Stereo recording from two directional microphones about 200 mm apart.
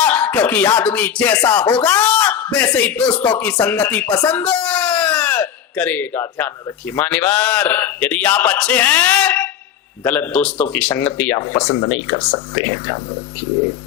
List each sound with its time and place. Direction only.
0.0 s speech: 10° left (ahead or behind)
11.3 s speech: 25° left (ahead or behind)